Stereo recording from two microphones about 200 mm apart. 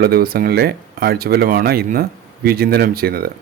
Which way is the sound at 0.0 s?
50° right (ahead or behind).